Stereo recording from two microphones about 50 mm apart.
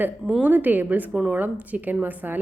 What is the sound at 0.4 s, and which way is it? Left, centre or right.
A woman's voice, right.